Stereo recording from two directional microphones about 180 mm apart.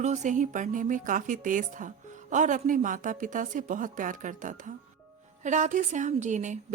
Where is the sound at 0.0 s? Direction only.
40° right (ahead or behind).